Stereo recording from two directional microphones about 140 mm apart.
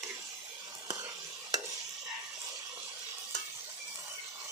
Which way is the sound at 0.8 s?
25° right (ahead or behind).